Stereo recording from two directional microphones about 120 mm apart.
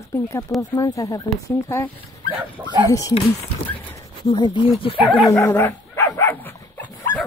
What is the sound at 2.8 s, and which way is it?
Speech, 30° left (ahead or behind).